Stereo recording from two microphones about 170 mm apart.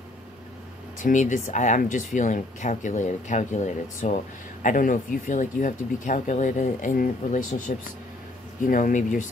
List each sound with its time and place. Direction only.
0.9 s speech: 45° left (ahead or behind)